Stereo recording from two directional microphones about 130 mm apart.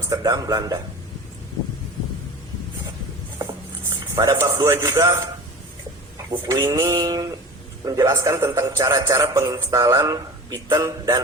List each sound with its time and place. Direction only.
0.1 s speech: 30° right (ahead or behind)
4.1 s speech: 25° right (ahead or behind)
6.3 s speech: 25° right (ahead or behind)